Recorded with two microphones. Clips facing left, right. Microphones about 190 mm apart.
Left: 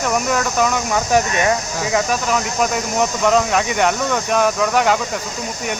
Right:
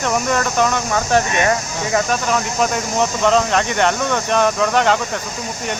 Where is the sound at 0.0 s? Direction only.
5° left (ahead or behind).